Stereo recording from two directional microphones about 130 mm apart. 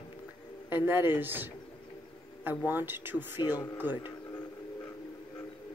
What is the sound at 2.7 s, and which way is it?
Speech, 15° right (ahead or behind).